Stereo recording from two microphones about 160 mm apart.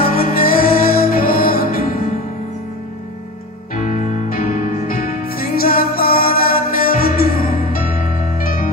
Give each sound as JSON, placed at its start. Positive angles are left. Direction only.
{"t": 0.0, "sound": "music", "side_deg": 60}
{"t": 3.8, "sound": "music", "side_deg": 50}